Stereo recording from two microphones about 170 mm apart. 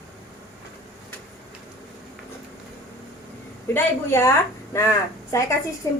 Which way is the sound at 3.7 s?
15° left (ahead or behind).